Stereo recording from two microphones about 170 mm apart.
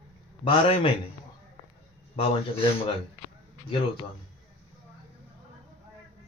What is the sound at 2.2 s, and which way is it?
Speech, 35° left (ahead or behind).